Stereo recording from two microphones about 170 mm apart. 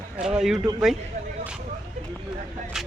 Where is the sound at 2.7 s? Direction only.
5° right (ahead or behind).